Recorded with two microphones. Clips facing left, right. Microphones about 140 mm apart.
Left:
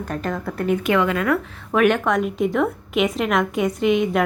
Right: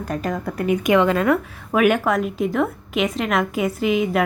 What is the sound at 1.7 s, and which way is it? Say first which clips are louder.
A woman's voice: even; 5° right (ahead or behind).